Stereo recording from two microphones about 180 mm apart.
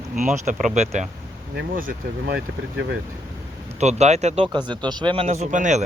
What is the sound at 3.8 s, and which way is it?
Speech, 40° right (ahead or behind).